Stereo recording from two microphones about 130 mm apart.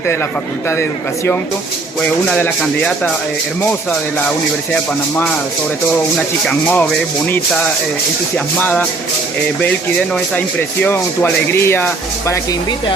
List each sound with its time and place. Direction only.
2.4 s speech: 10° left (ahead or behind)
6.1 s speech: 10° left (ahead or behind)
8.5 s speech: 10° left (ahead or behind)
10.8 s speech: 15° left (ahead or behind)